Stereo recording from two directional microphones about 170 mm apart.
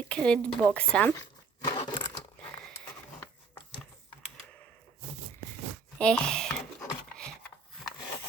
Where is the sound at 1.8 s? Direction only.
25° left (ahead or behind).